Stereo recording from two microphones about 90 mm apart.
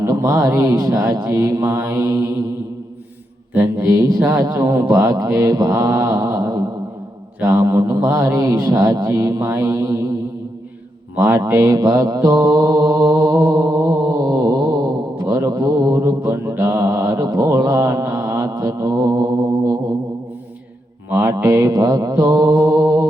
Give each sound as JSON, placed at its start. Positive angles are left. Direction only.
{"t": 0.1, "sound": "a man's voice", "side_deg": -40}
{"t": 3.8, "sound": "a man's voice", "side_deg": -40}
{"t": 11.2, "sound": "a man's voice", "side_deg": -40}
{"t": 11.4, "sound": "mantra", "side_deg": -40}
{"t": 21.2, "sound": "a man's voice", "side_deg": -40}